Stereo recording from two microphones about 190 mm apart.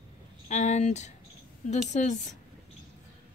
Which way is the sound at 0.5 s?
40° left (ahead or behind).